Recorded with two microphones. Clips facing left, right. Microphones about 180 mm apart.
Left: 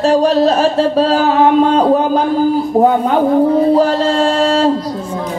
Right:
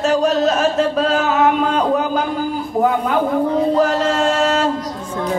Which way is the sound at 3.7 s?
30° left (ahead or behind).